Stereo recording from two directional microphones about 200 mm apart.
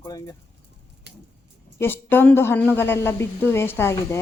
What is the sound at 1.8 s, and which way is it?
Speech, 10° left (ahead or behind).